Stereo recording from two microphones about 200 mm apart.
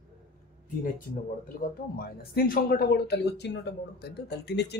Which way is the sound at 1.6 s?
50° left (ahead or behind).